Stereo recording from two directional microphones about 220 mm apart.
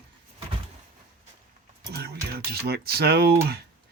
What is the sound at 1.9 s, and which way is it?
Speech, 45° right (ahead or behind).